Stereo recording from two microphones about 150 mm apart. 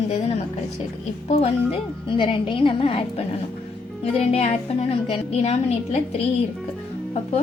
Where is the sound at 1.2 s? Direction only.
45° left (ahead or behind).